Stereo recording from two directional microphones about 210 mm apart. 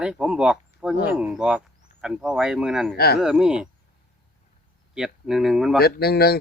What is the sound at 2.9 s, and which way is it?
Speech, 50° left (ahead or behind).